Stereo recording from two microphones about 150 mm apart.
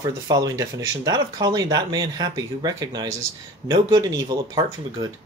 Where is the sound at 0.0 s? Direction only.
25° right (ahead or behind).